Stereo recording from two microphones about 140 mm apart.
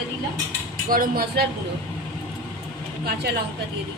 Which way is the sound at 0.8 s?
90° right.